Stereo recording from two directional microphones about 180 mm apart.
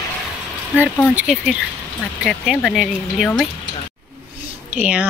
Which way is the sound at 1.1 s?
5° right (ahead or behind).